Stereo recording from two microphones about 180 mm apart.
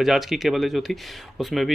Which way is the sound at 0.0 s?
Centre (ahead or behind).